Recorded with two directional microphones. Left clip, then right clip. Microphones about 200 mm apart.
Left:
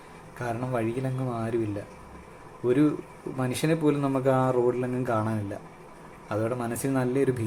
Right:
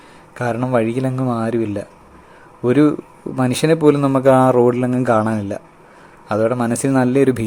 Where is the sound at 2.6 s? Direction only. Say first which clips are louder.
Right 9 dB; 50° right (ahead or behind).